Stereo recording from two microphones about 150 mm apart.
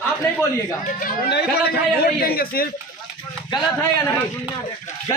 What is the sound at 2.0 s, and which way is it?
Speech, 85° left.